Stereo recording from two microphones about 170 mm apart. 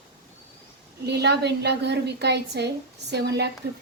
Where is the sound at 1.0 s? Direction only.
80° right.